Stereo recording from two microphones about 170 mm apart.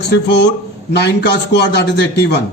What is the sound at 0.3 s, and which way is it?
A man's voice, 85° left.